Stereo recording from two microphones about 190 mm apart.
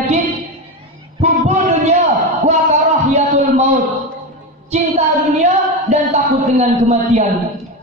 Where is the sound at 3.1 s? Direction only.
35° right (ahead or behind).